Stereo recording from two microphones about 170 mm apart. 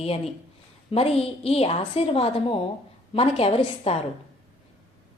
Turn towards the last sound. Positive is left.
turn(degrees=35)  # may be behind; listen again after turning